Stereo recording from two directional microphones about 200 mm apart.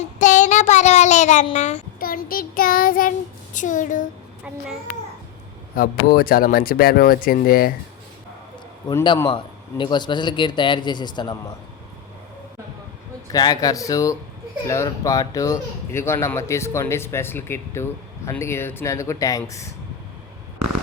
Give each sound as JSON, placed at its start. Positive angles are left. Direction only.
{"t": 0.2, "sound": "child singing", "side_deg": 40}
{"t": 1.5, "sound": "speech", "side_deg": 35}
{"t": 5.7, "sound": "speech", "side_deg": 45}
{"t": 8.9, "sound": "a man's voice", "side_deg": 15}
{"t": 13.3, "sound": "speech", "side_deg": 20}